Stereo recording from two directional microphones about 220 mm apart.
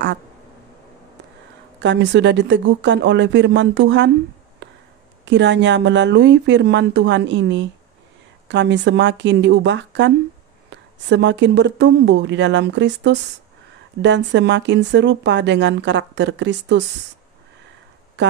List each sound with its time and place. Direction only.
1.8 s speech: 55° right (ahead or behind)
4.6 s a sound: 55° right (ahead or behind)
5.2 s speech: 55° right (ahead or behind)